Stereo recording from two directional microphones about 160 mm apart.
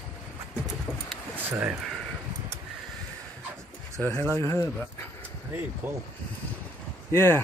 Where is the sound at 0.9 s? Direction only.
15° right (ahead or behind).